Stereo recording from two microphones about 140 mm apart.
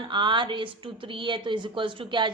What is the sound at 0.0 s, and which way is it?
A woman's voice, 35° right (ahead or behind).